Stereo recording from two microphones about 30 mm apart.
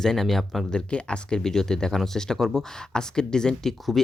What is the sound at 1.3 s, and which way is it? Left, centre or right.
Speech, centre.